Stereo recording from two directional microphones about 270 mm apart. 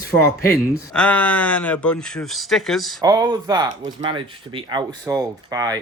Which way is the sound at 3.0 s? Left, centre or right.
Centre.